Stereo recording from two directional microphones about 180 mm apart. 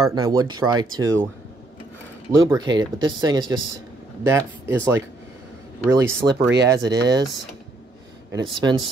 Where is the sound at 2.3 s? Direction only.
20° right (ahead or behind).